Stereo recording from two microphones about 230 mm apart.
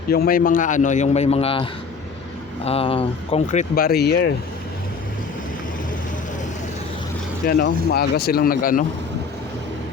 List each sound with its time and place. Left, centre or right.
0.1 s speech: left
2.6 s speech: left
7.4 s speech: left